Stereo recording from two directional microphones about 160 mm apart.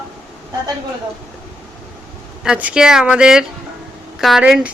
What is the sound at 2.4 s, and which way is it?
Speech, 5° right (ahead or behind).